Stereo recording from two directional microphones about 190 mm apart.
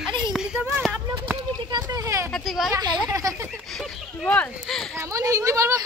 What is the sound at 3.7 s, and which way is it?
Speech, centre (ahead or behind).